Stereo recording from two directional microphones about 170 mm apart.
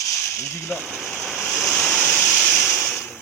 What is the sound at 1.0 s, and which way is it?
Waves, 5° left (ahead or behind).